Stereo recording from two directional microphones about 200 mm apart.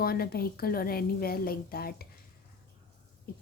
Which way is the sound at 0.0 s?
50° left (ahead or behind).